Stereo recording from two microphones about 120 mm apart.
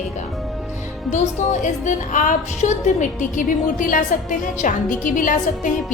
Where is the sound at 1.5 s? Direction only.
90° left.